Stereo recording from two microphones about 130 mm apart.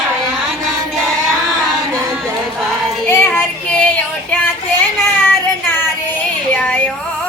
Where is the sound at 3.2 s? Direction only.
15° left (ahead or behind).